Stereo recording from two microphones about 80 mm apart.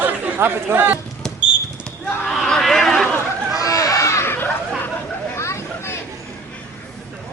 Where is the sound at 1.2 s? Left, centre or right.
Centre.